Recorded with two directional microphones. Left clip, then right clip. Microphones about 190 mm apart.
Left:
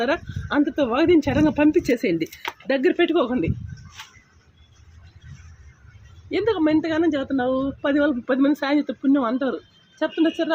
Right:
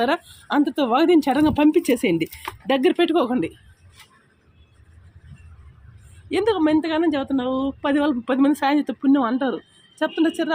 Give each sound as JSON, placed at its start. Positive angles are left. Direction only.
{"t": 0.0, "sound": "speech", "side_deg": -50}
{"t": 6.3, "sound": "speech", "side_deg": -50}